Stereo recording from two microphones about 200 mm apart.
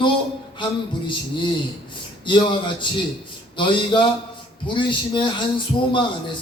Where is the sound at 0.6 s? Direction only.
25° left (ahead or behind).